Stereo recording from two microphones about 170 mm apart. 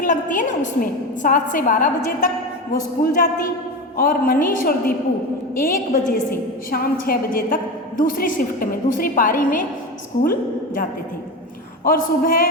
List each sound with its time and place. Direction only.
0.0 s a woman's voice: 50° left (ahead or behind)
11.9 s a man's voice: 55° left (ahead or behind)